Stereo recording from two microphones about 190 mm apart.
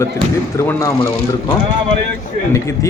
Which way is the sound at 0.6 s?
15° left (ahead or behind).